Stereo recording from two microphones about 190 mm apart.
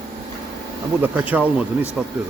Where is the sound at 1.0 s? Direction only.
10° right (ahead or behind).